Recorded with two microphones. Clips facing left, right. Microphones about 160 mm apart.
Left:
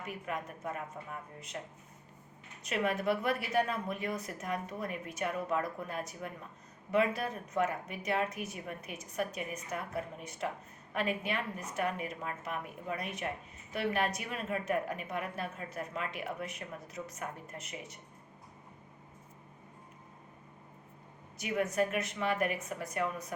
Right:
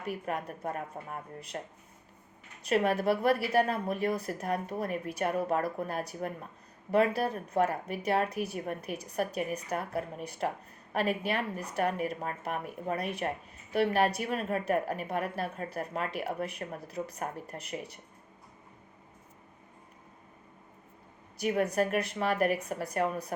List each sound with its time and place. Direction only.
0.4 s speech: 40° right (ahead or behind)
2.6 s speech: 35° right (ahead or behind)
21.4 s speech: 35° right (ahead or behind)